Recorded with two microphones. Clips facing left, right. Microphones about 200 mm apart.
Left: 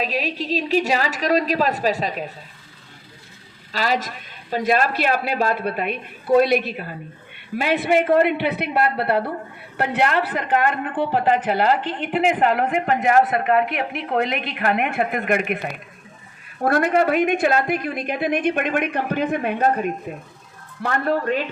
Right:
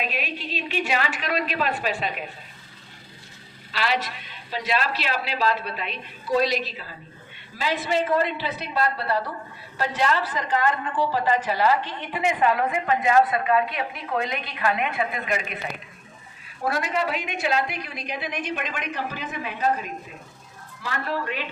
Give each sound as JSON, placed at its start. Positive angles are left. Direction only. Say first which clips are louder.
{"t": 0.0, "sound": "a woman's voice", "louder": "left 6 dB", "side_deg": 35}
{"t": 3.7, "sound": "speech", "louder": "left 3 dB", "side_deg": 40}